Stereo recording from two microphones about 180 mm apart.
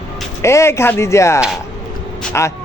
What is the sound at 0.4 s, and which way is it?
Speech, 15° left (ahead or behind).